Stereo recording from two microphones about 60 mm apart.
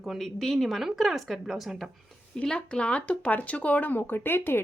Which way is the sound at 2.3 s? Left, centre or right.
Centre.